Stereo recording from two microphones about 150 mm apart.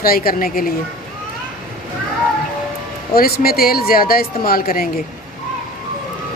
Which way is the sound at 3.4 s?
90° left.